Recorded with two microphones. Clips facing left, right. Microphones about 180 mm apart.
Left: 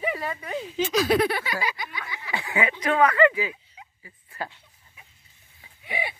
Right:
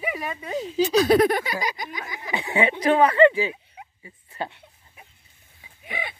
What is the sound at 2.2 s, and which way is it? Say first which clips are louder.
Chuckle: right 4 dB; 20° right (ahead or behind).